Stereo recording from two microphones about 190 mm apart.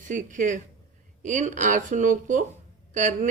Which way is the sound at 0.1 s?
40° right (ahead or behind).